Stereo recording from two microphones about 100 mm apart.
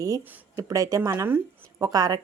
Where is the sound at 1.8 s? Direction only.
40° right (ahead or behind).